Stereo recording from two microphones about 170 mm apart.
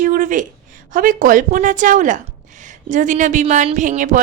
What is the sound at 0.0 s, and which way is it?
Speech, 50° right (ahead or behind).